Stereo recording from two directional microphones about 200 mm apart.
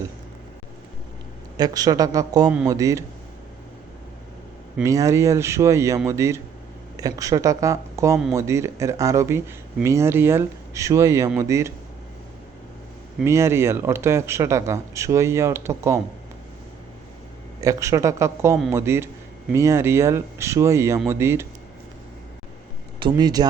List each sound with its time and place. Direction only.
1.5 s a man's voice: 20° right (ahead or behind)
4.8 s a man's voice: 15° right (ahead or behind)
13.2 s a man's voice: 15° right (ahead or behind)
17.6 s a man's voice: 15° right (ahead or behind)
23.0 s a man's voice: 20° right (ahead or behind)